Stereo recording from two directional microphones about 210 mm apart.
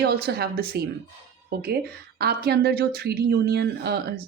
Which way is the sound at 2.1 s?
50° right (ahead or behind).